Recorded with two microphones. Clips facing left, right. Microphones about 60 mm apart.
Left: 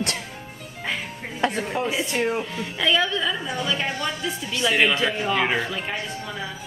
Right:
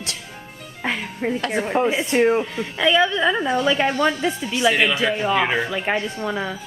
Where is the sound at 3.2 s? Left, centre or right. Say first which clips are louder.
Right 7 dB; right.